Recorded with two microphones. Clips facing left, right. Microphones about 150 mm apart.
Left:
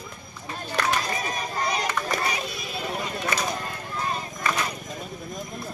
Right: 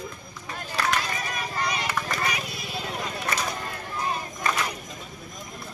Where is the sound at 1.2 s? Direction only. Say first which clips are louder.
Left 2 dB; 35° left (ahead or behind).